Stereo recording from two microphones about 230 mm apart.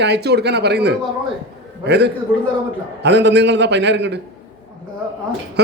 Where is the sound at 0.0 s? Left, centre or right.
Right.